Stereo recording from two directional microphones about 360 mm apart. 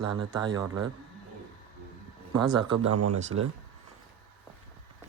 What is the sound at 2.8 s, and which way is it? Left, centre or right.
Speech, right.